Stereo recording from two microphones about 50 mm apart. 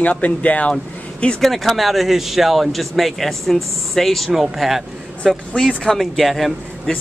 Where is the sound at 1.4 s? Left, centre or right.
Centre.